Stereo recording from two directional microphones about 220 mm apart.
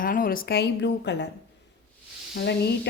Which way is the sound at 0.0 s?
40° left (ahead or behind).